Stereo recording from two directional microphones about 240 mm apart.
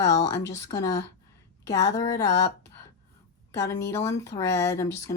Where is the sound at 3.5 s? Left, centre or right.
Centre.